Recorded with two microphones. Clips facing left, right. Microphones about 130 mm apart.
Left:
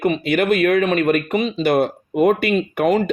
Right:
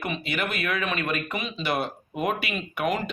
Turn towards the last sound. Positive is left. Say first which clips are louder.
# left 10 dB
turn(degrees=45)  # may be behind; listen again after turning